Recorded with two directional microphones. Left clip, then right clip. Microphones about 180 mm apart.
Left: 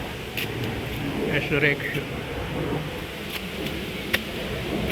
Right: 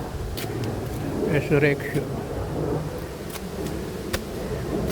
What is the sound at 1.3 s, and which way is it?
Speech, 40° right (ahead or behind).